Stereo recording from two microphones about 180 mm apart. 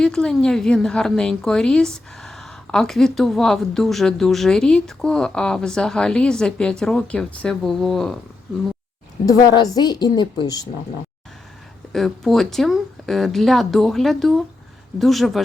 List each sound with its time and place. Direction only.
0.0 s a woman's voice: 5° left (ahead or behind)
9.2 s a woman's voice: 20° left (ahead or behind)
11.9 s a woman's voice: centre (ahead or behind)